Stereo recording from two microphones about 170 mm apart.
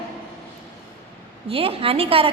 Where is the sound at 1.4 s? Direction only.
35° right (ahead or behind).